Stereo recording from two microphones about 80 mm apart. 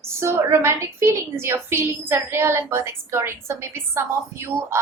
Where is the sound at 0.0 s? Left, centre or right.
Right.